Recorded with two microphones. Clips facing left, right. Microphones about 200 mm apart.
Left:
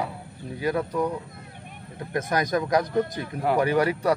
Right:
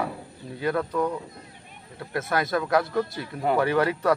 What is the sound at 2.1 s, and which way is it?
A man's voice, 15° left (ahead or behind).